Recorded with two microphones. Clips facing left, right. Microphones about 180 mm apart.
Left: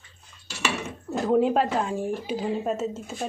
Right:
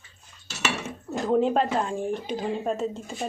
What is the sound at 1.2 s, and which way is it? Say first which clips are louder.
A woman's voice: left 1 dB; 5° left (ahead or behind).